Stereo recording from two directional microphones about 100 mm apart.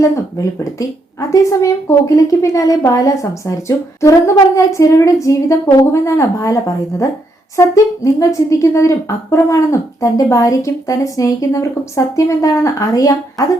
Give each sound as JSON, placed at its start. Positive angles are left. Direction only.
{"t": 1.3, "sound": "speech", "side_deg": 30}